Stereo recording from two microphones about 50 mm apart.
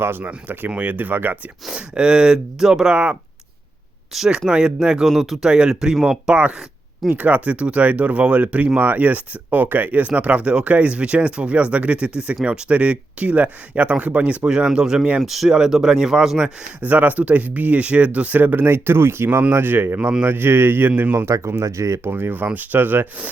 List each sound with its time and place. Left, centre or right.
0.0 s speech: right
1.7 s speech: centre
2.9 s speech: right
4.3 s speech: centre
5.5 s speech: centre
6.3 s speech: right
14.4 s speech: centre
16.8 s speech: right
20.0 s speech: right
20.2 s speech: right
21.2 s speech: right
22.1 s speech: right